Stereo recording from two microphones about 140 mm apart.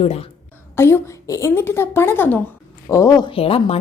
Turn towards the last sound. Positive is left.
turn(degrees=40)  # may be behind; listen again after turning